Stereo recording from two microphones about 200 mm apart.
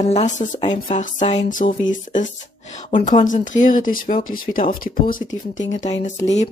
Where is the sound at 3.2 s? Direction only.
40° left (ahead or behind).